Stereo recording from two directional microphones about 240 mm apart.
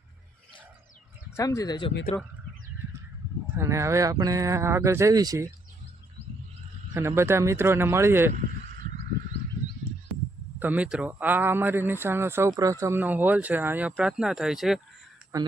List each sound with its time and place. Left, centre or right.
1.4 s speech: centre
3.5 s a man's voice: centre
6.9 s a man's voice: centre
10.6 s a man's voice: centre